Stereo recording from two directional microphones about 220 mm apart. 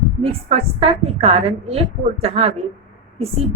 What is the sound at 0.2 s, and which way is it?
A woman's voice, 25° right (ahead or behind).